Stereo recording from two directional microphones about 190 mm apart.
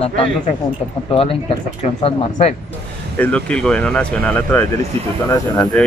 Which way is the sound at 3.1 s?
5° left (ahead or behind).